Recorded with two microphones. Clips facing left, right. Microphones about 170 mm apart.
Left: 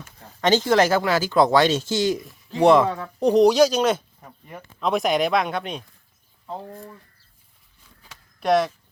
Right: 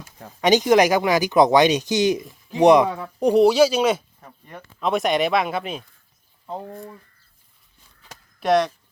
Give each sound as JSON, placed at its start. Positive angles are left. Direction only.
{"t": 0.4, "sound": "speech", "side_deg": -15}
{"t": 2.9, "sound": "speech", "side_deg": -5}
{"t": 4.2, "sound": "speech", "side_deg": 5}
{"t": 8.4, "sound": "speech", "side_deg": 0}